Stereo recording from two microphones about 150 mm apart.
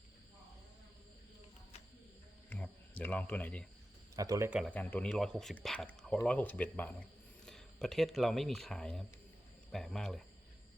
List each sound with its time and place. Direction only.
2.5 s cricket: 10° left (ahead or behind)
4.1 s speech: 25° right (ahead or behind)
4.6 s speech: 10° left (ahead or behind)